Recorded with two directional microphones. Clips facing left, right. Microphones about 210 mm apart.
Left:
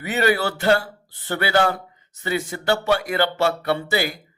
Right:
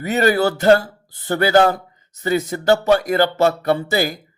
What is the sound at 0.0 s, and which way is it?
A man's voice, 40° right (ahead or behind).